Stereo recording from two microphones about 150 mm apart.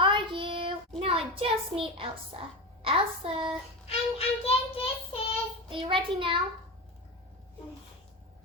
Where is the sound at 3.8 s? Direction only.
40° left (ahead or behind).